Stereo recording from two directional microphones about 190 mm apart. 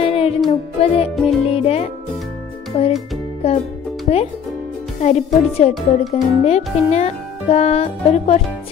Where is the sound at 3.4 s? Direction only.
30° left (ahead or behind).